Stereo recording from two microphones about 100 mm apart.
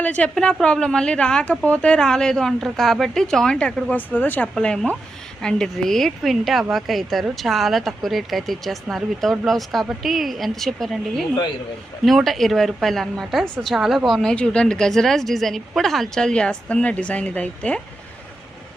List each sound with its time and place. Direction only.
0.0 s a woman's voice: 15° left (ahead or behind)